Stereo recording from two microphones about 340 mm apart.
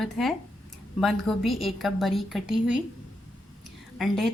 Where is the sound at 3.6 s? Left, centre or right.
Centre.